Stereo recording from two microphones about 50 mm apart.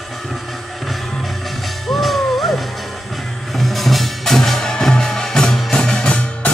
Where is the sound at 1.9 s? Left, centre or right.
Centre.